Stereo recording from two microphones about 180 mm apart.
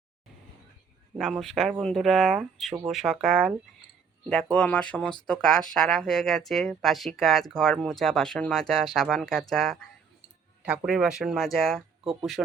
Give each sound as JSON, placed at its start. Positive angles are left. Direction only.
{"t": 1.2, "sound": "speech", "side_deg": 0}